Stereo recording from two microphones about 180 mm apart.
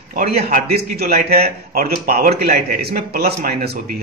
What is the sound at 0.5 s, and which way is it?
Speech, 40° right (ahead or behind).